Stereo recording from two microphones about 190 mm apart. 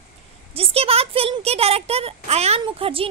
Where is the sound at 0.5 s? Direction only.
30° right (ahead or behind).